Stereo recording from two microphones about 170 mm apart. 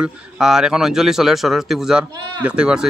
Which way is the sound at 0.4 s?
5° right (ahead or behind).